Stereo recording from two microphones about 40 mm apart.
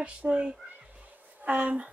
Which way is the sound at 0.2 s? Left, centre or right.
Right.